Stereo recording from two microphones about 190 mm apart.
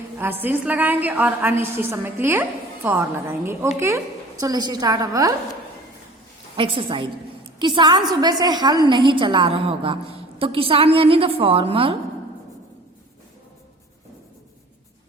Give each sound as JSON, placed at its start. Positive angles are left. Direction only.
{"t": 0.2, "sound": "a woman's voice", "side_deg": -10}
{"t": 6.6, "sound": "a woman's voice", "side_deg": -25}